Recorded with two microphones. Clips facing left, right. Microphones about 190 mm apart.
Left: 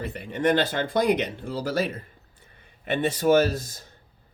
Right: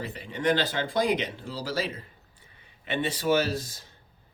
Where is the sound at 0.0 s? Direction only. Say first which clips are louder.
Left 4 dB; 55° left (ahead or behind).